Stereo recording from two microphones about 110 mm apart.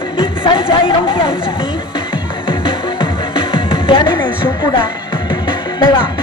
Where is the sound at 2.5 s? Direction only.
45° left (ahead or behind).